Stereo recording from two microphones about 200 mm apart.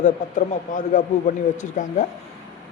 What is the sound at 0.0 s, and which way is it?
Speech, 40° left (ahead or behind).